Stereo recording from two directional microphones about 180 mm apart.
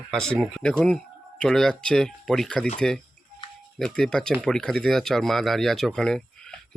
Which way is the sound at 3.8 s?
5° left (ahead or behind).